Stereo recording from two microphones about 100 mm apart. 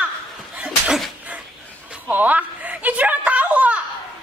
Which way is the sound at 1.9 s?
15° right (ahead or behind).